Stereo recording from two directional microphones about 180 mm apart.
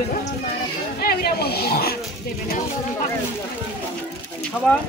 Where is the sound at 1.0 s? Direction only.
60° left (ahead or behind).